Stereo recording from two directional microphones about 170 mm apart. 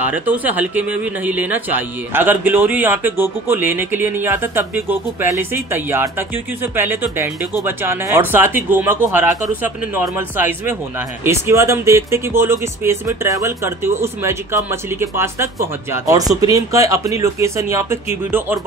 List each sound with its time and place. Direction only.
0.0 s a man's voice: 10° right (ahead or behind)